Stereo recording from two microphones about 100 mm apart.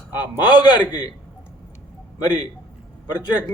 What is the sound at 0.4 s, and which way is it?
Speech, 45° left (ahead or behind).